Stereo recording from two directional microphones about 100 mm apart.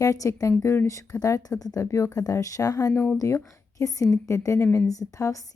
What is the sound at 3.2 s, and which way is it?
A woman's voice, 35° left (ahead or behind).